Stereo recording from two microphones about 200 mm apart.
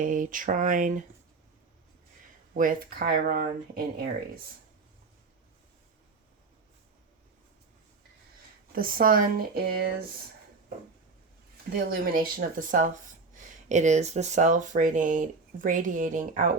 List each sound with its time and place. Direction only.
0.0 s speech: 40° right (ahead or behind)
2.6 s speech: 45° right (ahead or behind)
8.7 s speech: 45° right (ahead or behind)
11.7 s speech: 45° right (ahead or behind)